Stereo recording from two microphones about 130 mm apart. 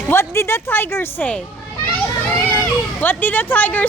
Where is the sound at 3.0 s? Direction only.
15° left (ahead or behind).